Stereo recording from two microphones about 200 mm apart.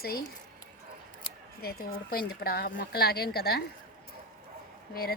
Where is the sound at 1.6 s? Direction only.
50° left (ahead or behind).